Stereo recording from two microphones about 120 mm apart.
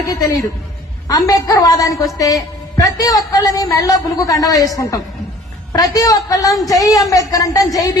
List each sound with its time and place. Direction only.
0.0 s a woman's voice: 30° left (ahead or behind)